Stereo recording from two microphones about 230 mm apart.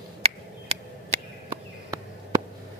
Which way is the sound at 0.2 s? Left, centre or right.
Right.